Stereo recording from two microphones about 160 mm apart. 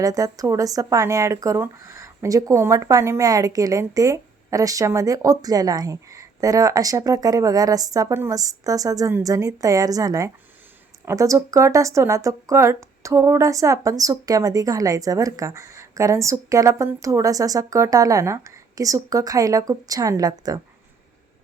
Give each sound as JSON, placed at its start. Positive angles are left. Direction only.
{"t": 0.0, "sound": "speech", "side_deg": -20}